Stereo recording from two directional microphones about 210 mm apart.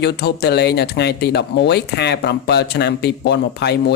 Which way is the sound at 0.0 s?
50° left (ahead or behind).